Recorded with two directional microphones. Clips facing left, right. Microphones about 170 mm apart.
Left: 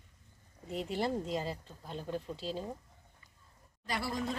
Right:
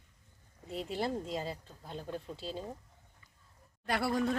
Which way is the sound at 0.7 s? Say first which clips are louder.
Left 1 dB; centre (ahead or behind).